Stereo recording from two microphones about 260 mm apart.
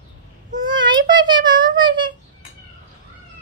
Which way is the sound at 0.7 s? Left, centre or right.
Centre.